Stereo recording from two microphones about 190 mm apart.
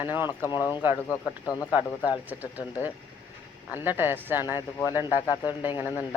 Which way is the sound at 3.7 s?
10° right (ahead or behind).